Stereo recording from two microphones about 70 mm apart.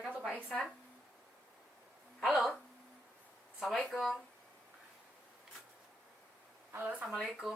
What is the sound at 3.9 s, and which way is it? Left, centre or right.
Speech, centre.